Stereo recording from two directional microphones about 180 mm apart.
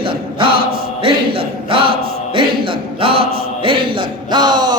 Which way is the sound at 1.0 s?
30° right (ahead or behind).